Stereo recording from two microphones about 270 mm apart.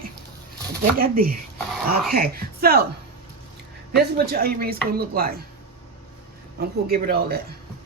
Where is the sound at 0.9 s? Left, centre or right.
Right.